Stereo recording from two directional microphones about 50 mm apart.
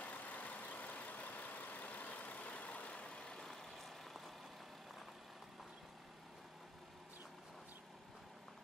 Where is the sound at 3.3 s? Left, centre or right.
Centre.